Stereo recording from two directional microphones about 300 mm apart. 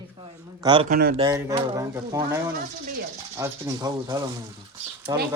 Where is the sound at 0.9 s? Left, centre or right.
Right.